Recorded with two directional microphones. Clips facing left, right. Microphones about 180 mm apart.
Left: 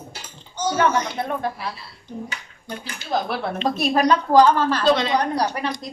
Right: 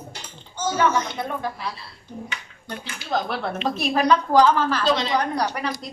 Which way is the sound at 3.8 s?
40° left (ahead or behind).